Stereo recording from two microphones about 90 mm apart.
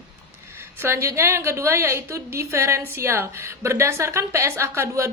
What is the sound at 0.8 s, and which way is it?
A woman's voice, 30° right (ahead or behind).